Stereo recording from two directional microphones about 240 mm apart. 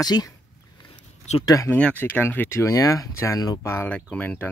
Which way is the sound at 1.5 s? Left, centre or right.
Centre.